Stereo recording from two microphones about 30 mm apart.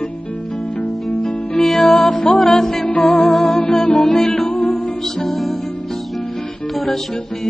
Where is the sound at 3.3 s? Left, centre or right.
Left.